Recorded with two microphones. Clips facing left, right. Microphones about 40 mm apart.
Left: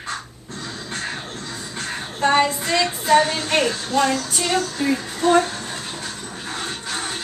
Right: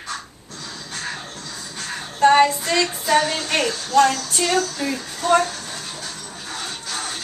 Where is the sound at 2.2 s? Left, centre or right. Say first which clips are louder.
Right 4 dB; centre.